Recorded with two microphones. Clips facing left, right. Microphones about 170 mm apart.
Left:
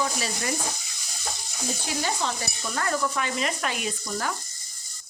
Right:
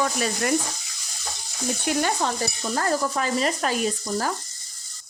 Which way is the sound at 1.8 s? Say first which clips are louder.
Right 5 dB; 60° right (ahead or behind).